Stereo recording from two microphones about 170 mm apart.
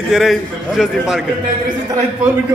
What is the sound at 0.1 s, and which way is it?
A man's voice, centre (ahead or behind).